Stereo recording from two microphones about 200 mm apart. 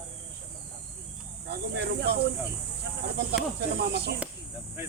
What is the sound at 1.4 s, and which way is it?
Speech, 55° right (ahead or behind).